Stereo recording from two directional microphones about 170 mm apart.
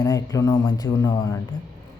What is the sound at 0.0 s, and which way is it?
Speech, 20° left (ahead or behind).